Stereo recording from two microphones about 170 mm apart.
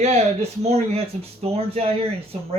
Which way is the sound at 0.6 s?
40° right (ahead or behind).